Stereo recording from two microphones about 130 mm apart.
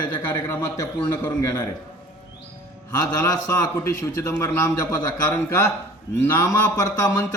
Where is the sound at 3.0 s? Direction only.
25° left (ahead or behind).